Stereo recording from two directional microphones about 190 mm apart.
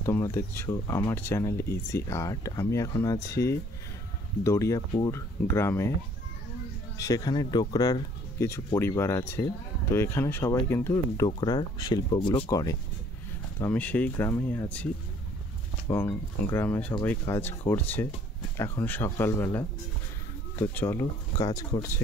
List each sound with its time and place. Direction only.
0.0 s speech: 15° left (ahead or behind)
7.0 s speech: 20° left (ahead or behind)
15.9 s speech: 10° left (ahead or behind)